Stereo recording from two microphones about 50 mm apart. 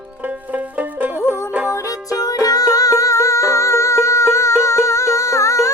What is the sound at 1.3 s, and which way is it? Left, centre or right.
Music, right.